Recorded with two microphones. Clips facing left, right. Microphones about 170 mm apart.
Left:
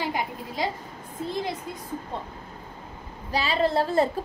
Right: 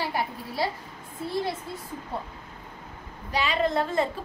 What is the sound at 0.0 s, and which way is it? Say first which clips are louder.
Speech: even; 20° left (ahead or behind).